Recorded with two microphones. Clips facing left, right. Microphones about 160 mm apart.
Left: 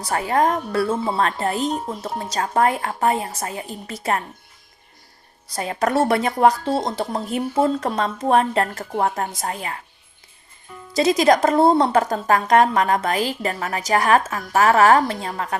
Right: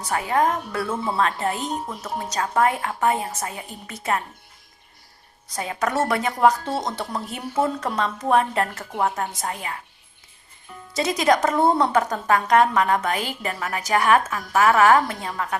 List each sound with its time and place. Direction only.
0.0 s a woman's voice: 35° left (ahead or behind)
5.5 s a woman's voice: 35° left (ahead or behind)
10.9 s a woman's voice: 35° left (ahead or behind)